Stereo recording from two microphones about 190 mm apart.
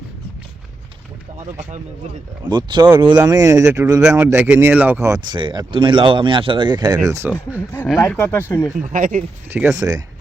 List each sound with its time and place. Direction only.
1.4 s speech: 40° right (ahead or behind)
2.4 s speech: 25° right (ahead or behind)
2.8 s speech: 10° right (ahead or behind)
7.9 s speech: 10° left (ahead or behind)
8.9 s speech: 45° right (ahead or behind)
9.5 s speech: 5° right (ahead or behind)
9.7 s speech: 20° right (ahead or behind)